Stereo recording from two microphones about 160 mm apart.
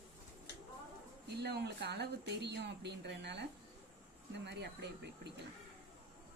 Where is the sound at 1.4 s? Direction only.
90° right.